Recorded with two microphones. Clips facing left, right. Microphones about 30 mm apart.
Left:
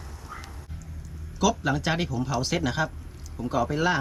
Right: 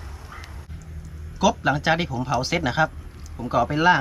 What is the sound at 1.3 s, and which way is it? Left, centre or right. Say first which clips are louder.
Speech: right 4 dB; centre.